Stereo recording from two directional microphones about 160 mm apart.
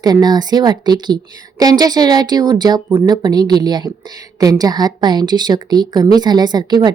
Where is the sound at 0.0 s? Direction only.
25° right (ahead or behind).